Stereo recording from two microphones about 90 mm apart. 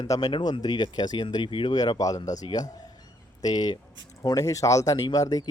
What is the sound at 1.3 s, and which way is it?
Speech, 70° left (ahead or behind).